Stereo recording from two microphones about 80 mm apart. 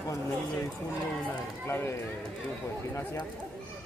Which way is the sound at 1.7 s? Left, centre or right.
Left.